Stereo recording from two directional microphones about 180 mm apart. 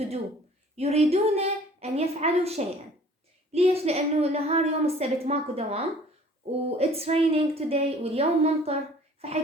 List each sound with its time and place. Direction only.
0.8 s a woman's voice: 35° right (ahead or behind)